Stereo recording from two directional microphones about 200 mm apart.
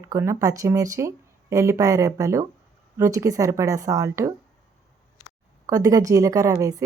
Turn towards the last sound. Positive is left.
turn(degrees=-15)  # may be behind; listen again after turning